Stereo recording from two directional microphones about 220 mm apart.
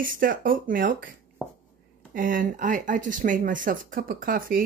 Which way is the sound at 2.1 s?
40° right (ahead or behind).